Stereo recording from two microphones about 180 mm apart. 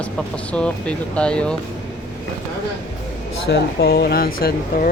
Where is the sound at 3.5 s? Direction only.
65° left (ahead or behind).